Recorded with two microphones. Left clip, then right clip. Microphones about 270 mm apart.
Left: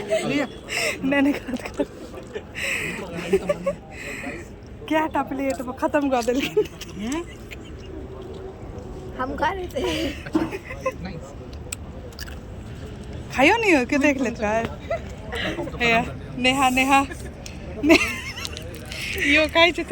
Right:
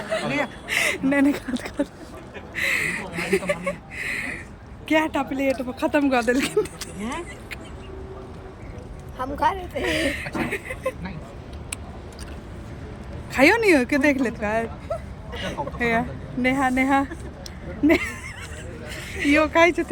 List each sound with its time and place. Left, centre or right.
0.1 s speech: centre
2.6 s a sound: centre
4.9 s speech: centre
9.1 s speech: right
13.3 s speech: centre
15.3 s speech: centre
15.8 s speech: right
17.8 s honk: right
19.4 s speech: centre